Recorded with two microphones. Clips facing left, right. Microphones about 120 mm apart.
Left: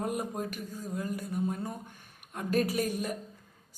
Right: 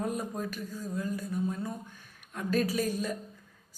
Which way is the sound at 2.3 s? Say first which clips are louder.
Even; 20° left (ahead or behind).